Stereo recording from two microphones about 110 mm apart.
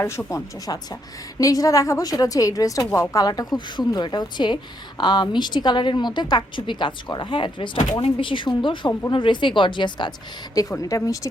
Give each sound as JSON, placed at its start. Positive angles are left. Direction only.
{"t": 0.0, "sound": "a woman's voice", "side_deg": 25}
{"t": 10.5, "sound": "a woman's voice", "side_deg": 30}